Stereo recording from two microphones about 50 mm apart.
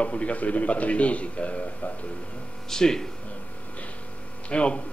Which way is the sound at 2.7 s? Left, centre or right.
Centre.